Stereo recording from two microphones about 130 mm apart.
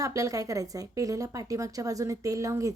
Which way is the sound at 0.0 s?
25° right (ahead or behind).